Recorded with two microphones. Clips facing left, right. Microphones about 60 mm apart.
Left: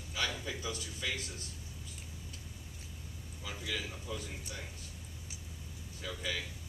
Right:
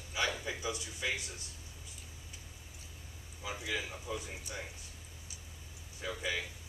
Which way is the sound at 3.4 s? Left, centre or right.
Centre.